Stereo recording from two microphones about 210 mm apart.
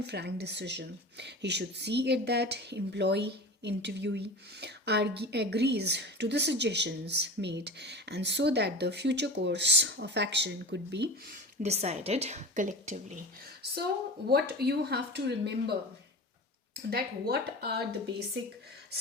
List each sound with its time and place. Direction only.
0.0 s speech: 55° right (ahead or behind)
11.6 s a woman's voice: 30° right (ahead or behind)
14.3 s speech: 50° right (ahead or behind)
16.9 s speech: 50° right (ahead or behind)